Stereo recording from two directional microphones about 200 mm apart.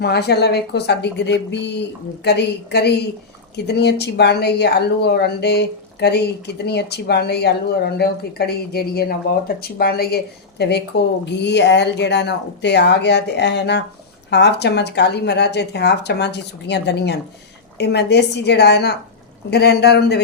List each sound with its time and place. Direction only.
0.0 s speech: 55° left (ahead or behind)